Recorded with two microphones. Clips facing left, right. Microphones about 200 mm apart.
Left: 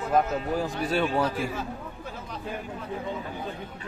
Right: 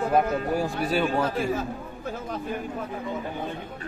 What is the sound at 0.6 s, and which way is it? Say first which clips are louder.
Speech: right 1 dB; 5° right (ahead or behind).